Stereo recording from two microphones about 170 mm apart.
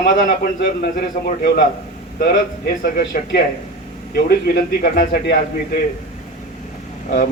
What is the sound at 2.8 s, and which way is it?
Speech, 65° left (ahead or behind).